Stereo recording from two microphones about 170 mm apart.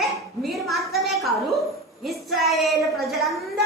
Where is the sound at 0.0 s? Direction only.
Centre (ahead or behind).